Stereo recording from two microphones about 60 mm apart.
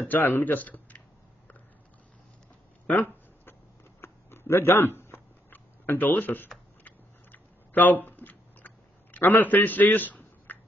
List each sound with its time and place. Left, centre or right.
0.0 s speech: left
4.0 s a sound: left
7.3 s chewing: left